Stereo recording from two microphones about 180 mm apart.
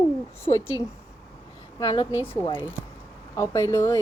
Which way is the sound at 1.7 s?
25° left (ahead or behind).